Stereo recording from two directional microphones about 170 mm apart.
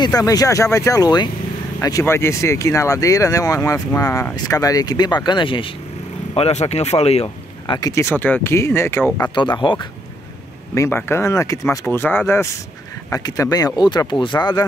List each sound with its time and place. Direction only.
0.0 s speech: 20° left (ahead or behind)
9.3 s speech: 30° left (ahead or behind)
10.7 s speech: 15° left (ahead or behind)